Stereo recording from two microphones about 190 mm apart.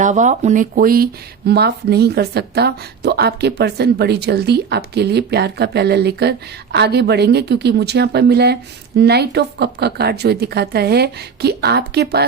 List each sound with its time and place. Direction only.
0.0 s speech: 40° right (ahead or behind); by 12.2 s 60° right (ahead or behind)